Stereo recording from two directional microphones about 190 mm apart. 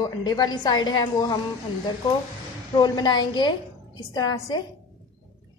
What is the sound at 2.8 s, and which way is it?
A woman's voice, 20° left (ahead or behind).